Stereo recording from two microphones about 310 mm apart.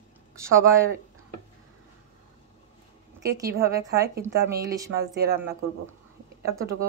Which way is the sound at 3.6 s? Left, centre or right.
Centre.